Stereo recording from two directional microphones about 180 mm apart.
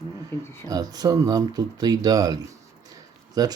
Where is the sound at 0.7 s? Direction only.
20° right (ahead or behind).